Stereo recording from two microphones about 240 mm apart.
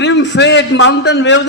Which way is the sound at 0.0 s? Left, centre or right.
Left.